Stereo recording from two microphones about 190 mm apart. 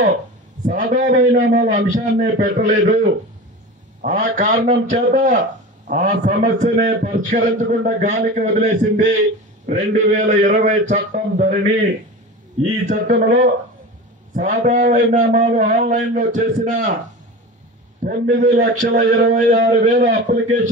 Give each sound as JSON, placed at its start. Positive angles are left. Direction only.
{"t": 0.7, "sound": "a man's voice", "side_deg": -45}
{"t": 18.4, "sound": "a man's voice", "side_deg": -40}